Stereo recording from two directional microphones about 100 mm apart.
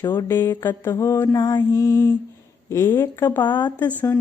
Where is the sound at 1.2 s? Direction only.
35° left (ahead or behind).